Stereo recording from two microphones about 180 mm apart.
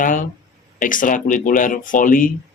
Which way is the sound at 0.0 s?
45° left (ahead or behind).